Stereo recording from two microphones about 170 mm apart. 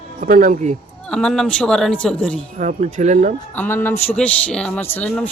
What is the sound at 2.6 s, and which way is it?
Speech, 45° right (ahead or behind).